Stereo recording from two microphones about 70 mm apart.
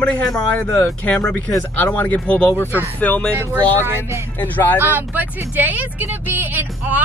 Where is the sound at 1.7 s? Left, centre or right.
Left.